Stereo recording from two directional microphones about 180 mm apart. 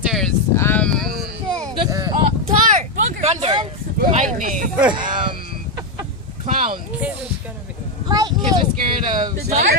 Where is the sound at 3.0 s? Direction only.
35° right (ahead or behind).